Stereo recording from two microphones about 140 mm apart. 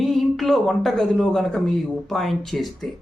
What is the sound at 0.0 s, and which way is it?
Speech, centre (ahead or behind).